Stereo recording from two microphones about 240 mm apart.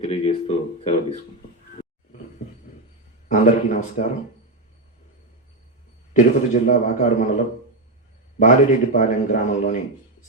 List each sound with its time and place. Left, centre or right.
0.0 s a sound: left
3.2 s a man's voice: left
6.1 s a man's voice: left
8.4 s a man's voice: left